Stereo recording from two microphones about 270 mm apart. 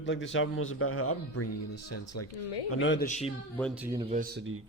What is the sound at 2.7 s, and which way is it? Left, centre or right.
Speech, left.